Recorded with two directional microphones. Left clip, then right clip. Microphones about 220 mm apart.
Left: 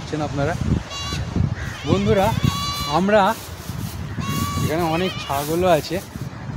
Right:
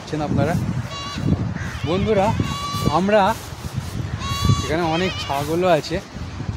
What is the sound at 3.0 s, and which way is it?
Speech, 5° left (ahead or behind).